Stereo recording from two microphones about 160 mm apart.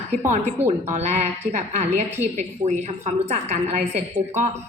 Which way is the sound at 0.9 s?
45° right (ahead or behind).